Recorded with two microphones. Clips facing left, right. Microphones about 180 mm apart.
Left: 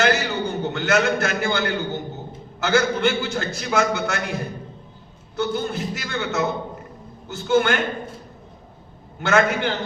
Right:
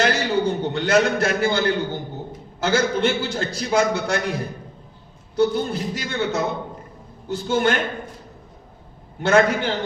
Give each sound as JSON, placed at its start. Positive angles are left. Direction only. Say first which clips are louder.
{"t": 0.0, "sound": "a sound", "louder": "right 1 dB", "side_deg": -35}
{"t": 2.6, "sound": "a man's voice", "louder": "even", "side_deg": -35}
{"t": 5.4, "sound": "a man's voice", "louder": "right 4 dB", "side_deg": -35}
{"t": 9.2, "sound": "a man's voice", "louder": "right 2 dB", "side_deg": -35}